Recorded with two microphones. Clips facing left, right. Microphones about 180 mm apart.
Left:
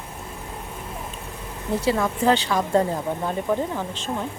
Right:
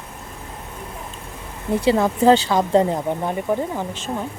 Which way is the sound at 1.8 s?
30° right (ahead or behind).